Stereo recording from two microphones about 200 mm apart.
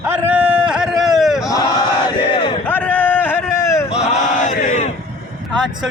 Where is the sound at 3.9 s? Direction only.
35° left (ahead or behind).